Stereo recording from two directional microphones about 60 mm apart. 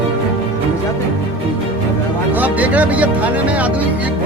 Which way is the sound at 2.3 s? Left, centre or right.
Right.